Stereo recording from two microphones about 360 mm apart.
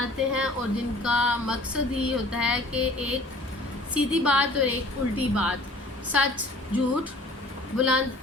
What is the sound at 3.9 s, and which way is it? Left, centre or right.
Female singing, centre.